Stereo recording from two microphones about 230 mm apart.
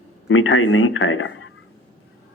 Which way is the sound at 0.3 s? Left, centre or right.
Left.